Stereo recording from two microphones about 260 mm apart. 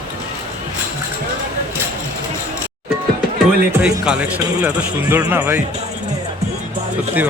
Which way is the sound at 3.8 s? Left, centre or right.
Centre.